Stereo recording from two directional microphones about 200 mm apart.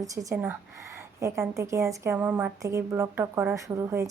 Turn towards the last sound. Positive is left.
turn(degrees=-15)  # may be behind; listen again after turning